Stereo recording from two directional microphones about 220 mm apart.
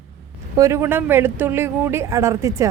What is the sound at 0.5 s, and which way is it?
Speech, 15° right (ahead or behind).